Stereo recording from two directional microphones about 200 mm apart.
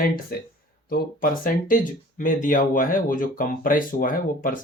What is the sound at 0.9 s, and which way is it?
Speech, 45° left (ahead or behind).